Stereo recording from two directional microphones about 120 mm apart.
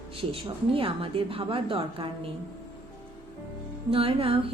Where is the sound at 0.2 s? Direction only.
50° right (ahead or behind).